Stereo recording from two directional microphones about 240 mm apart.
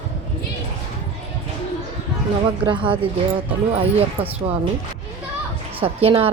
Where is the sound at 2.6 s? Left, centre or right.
Right.